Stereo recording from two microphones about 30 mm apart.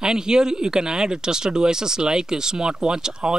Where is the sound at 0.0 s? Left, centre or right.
Right.